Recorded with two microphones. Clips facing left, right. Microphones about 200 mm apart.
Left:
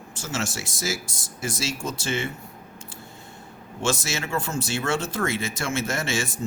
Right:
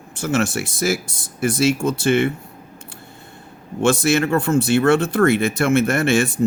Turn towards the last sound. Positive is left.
turn(degrees=-60)  # may be behind; listen again after turning